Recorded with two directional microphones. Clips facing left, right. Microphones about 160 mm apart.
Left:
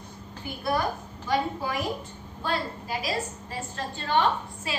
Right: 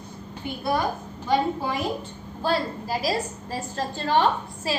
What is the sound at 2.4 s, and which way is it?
A woman's voice, 35° right (ahead or behind).